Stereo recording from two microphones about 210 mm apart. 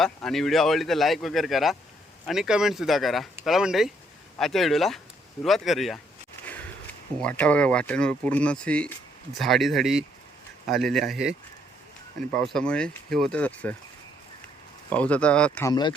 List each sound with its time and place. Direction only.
0.0 s speech: centre (ahead or behind)
6.4 s a sound: 5° left (ahead or behind)
7.2 s speech: 5° left (ahead or behind)
14.8 s speech: 5° left (ahead or behind)
15.7 s speech: 20° left (ahead or behind)